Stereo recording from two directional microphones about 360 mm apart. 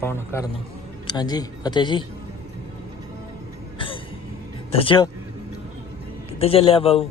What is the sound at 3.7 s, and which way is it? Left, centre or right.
Cough, centre.